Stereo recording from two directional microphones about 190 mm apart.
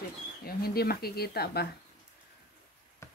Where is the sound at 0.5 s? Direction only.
55° left (ahead or behind).